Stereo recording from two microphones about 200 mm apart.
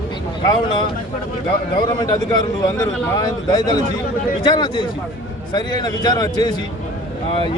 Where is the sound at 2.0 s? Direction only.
20° left (ahead or behind).